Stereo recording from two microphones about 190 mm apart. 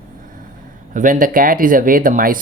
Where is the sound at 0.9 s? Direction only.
45° right (ahead or behind).